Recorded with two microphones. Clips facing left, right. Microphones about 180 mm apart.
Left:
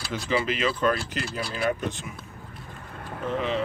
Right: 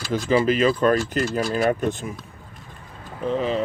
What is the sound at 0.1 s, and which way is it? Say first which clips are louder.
Speech: right 7 dB; 45° right (ahead or behind).